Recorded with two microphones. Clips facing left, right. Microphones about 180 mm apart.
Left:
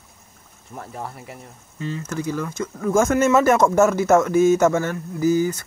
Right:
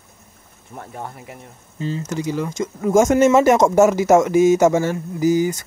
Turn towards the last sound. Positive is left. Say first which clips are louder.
# right 2 dB
turn(degrees=-10)  # may be behind; listen again after turning